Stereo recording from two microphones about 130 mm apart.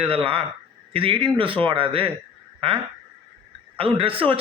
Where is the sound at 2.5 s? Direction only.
45° right (ahead or behind).